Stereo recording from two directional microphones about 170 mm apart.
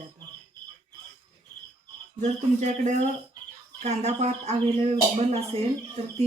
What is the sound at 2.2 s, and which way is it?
Speech, 45° right (ahead or behind).